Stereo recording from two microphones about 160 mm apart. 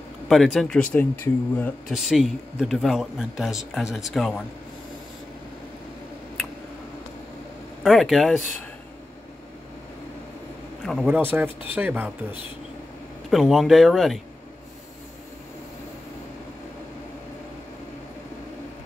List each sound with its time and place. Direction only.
0.3 s speech: centre (ahead or behind)
1.9 s speech: centre (ahead or behind)
7.8 s speech: centre (ahead or behind)
10.9 s speech: centre (ahead or behind)
11.1 s speech: 10° right (ahead or behind)